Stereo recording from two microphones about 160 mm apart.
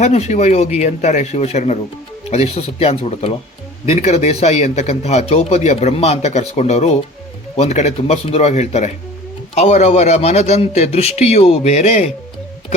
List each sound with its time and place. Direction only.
0.0 s a man's voice: 45° left (ahead or behind)